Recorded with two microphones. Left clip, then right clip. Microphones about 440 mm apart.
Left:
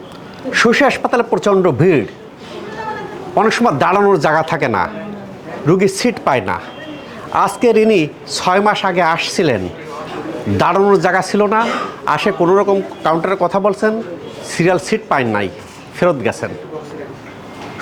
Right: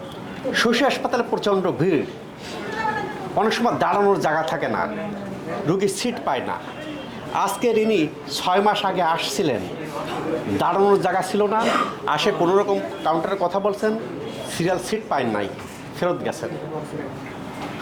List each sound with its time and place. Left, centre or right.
0.5 s speech: left
3.3 s speech: left
10.6 s speech: left